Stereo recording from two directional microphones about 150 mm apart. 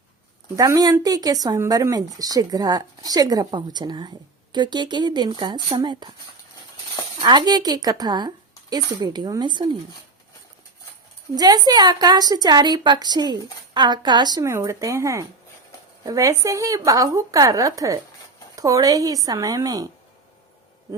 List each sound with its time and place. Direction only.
0.5 s a woman's voice: 25° right (ahead or behind)
7.2 s a woman's voice: 30° right (ahead or behind)
11.3 s a woman's voice: 25° right (ahead or behind)